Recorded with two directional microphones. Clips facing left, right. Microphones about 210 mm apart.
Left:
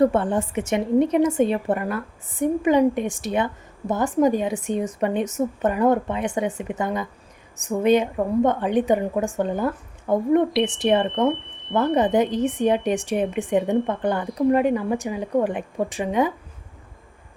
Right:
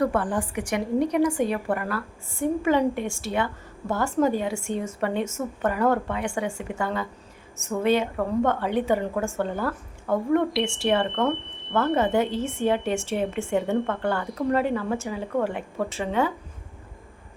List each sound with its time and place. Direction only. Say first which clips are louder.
0.0 s a woman's voice: left 5 dB; 25° left (ahead or behind)